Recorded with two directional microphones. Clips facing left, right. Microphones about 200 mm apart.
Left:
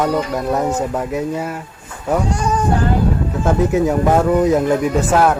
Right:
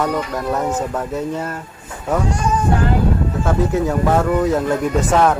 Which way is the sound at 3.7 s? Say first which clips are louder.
Left 2 dB; 15° left (ahead or behind).